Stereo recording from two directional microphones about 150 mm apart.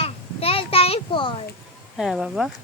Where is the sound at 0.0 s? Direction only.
40° left (ahead or behind).